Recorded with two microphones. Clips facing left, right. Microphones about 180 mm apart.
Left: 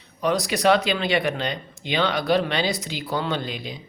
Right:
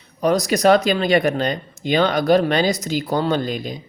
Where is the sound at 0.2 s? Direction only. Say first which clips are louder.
Right 5 dB; 40° right (ahead or behind).